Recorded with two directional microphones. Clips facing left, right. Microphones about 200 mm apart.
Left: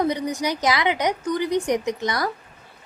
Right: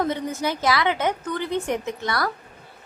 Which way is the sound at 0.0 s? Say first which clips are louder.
Left 2 dB; 15° left (ahead or behind).